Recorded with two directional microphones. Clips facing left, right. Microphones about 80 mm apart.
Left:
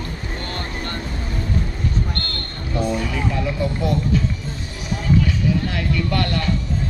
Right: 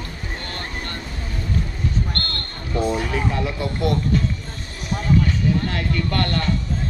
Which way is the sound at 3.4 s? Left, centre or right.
Centre.